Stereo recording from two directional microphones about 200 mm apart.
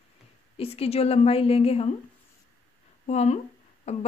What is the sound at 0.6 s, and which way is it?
Speech, 30° left (ahead or behind).